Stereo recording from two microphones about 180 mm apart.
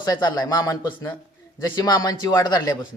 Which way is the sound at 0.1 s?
20° left (ahead or behind).